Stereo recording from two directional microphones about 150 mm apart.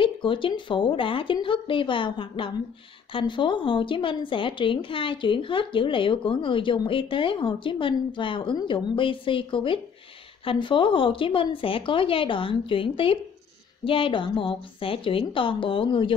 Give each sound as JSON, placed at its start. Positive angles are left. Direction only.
{"t": 0.0, "sound": "a woman's voice", "side_deg": 35}